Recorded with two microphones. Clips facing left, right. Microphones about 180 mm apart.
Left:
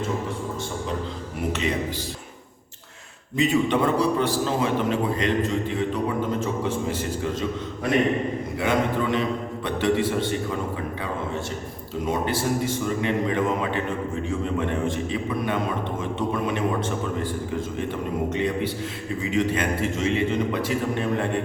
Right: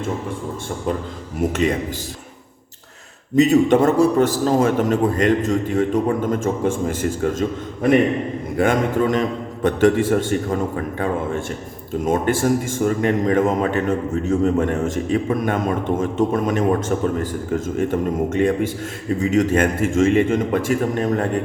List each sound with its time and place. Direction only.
3.3 s a man's voice: 40° right (ahead or behind)
12.0 s a man's voice: 50° right (ahead or behind)